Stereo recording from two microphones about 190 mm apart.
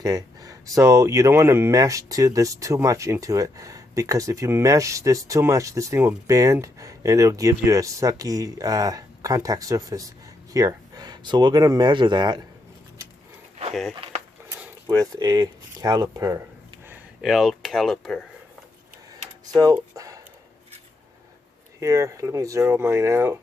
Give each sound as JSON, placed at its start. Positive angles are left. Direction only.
{"t": 0.0, "sound": "speech", "side_deg": -20}
{"t": 14.8, "sound": "speech", "side_deg": -20}
{"t": 16.9, "sound": "speech", "side_deg": 0}
{"t": 19.7, "sound": "a sound", "side_deg": -15}
{"t": 21.8, "sound": "speech", "side_deg": -15}